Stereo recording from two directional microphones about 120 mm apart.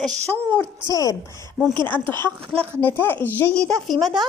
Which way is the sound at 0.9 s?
25° left (ahead or behind).